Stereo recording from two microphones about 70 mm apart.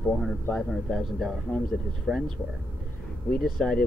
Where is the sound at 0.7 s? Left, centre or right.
Centre.